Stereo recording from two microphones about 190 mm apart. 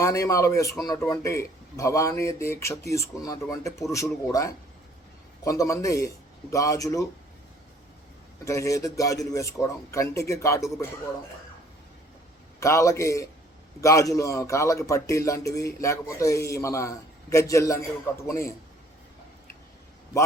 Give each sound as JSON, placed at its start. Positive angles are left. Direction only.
{"t": 0.0, "sound": "a man's voice", "side_deg": 15}
{"t": 8.4, "sound": "a man's voice", "side_deg": 15}
{"t": 12.5, "sound": "a man's voice", "side_deg": 15}